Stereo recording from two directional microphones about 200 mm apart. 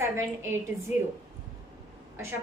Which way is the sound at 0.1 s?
10° right (ahead or behind).